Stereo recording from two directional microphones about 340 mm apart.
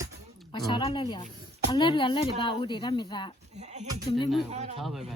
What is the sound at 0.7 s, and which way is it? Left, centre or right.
Speech, centre.